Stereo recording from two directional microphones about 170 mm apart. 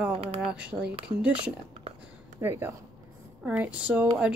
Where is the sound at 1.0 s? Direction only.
5° right (ahead or behind).